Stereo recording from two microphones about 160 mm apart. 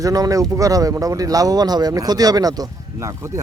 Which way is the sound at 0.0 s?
20° right (ahead or behind).